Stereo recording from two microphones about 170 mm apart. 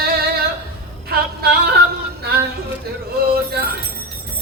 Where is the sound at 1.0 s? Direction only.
70° right (ahead or behind).